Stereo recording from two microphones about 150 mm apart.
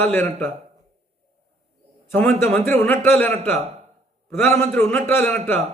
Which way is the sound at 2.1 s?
15° left (ahead or behind).